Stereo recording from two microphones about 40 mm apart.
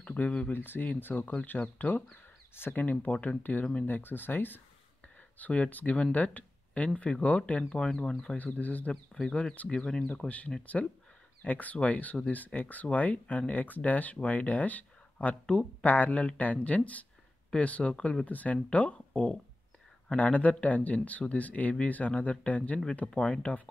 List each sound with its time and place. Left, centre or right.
0.0 s a sound: left
0.5 s speech: left
2.5 s speech: left
2.8 s speech: left
3.8 s speech: left
5.4 s speech: left
7.8 s speech: centre
8.5 s speech: left
9.3 s speech: left
10.0 s speech: left
17.9 s speech: left
18.2 s speech: left